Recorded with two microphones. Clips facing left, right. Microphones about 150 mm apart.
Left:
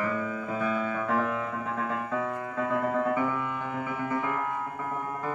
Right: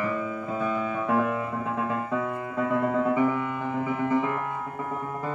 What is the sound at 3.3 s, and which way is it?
Music, 25° right (ahead or behind).